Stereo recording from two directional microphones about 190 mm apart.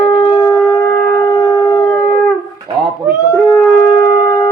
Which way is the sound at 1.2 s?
20° left (ahead or behind).